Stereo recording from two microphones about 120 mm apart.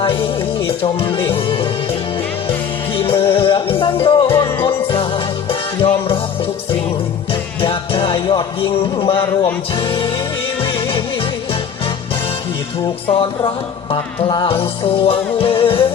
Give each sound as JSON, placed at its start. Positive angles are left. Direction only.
{"t": 0.0, "sound": "music", "side_deg": 45}
{"t": 4.4, "sound": "music", "side_deg": 20}
{"t": 4.6, "sound": "music", "side_deg": 50}
{"t": 7.6, "sound": "music", "side_deg": 45}
{"t": 13.9, "sound": "music", "side_deg": 45}